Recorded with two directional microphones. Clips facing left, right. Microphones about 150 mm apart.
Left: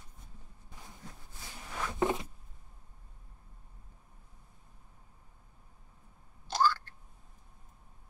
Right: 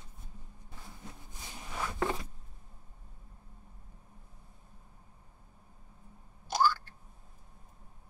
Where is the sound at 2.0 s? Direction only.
20° left (ahead or behind).